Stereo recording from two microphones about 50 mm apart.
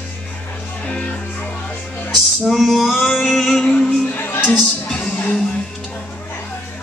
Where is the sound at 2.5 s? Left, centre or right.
Centre.